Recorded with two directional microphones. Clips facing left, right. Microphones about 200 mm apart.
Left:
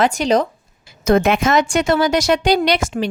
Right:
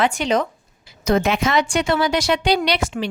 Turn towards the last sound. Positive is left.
turn(degrees=45)  # may be behind; listen again after turning